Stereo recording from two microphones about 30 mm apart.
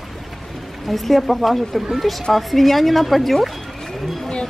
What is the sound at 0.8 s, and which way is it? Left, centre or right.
Speech, centre.